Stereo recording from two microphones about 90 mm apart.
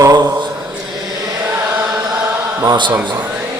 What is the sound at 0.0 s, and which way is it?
Speech, 50° right (ahead or behind).